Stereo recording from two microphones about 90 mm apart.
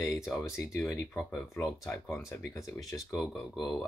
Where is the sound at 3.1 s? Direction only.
Centre (ahead or behind).